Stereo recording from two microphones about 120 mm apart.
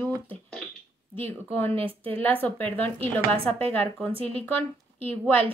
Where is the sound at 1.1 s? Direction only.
15° left (ahead or behind).